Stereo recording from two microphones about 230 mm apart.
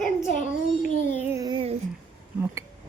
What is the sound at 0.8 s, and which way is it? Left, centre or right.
Child singing, centre.